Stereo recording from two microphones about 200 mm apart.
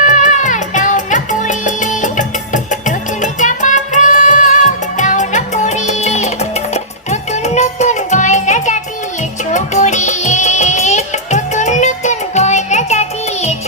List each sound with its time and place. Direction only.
0.0 s music: 40° left (ahead or behind)